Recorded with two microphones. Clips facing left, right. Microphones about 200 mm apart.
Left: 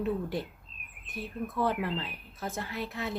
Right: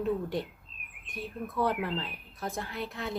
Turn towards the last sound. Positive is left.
turn(degrees=0)  # may be behind; listen again after turning